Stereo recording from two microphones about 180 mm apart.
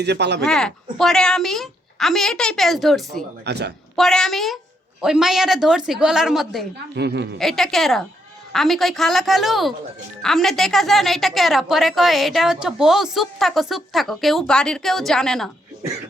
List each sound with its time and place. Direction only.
0.0 s speech: 70° right (ahead or behind)
0.4 s a woman's voice: 5° left (ahead or behind)
3.4 s speech: 70° right (ahead or behind)
3.9 s a woman's voice: centre (ahead or behind)
6.9 s speech: 70° right (ahead or behind)
7.3 s a woman's voice: centre (ahead or behind)